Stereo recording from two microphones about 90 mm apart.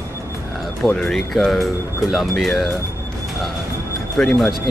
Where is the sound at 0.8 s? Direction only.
5° left (ahead or behind).